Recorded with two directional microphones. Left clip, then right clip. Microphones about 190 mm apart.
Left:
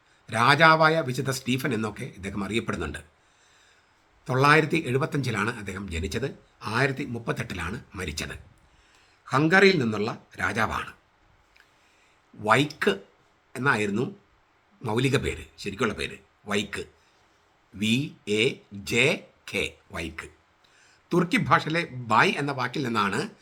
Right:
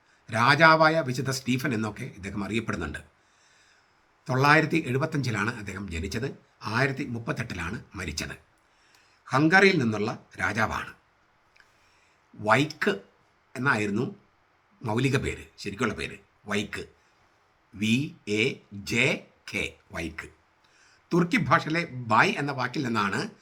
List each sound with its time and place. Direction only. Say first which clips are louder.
0.3 s speech: left 1 dB; 10° left (ahead or behind)
4.3 s speech: left 1 dB; 10° left (ahead or behind)
12.4 s speech: left 1 dB; 15° left (ahead or behind)